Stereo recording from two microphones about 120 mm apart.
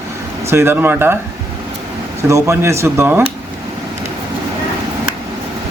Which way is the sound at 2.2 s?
25° right (ahead or behind).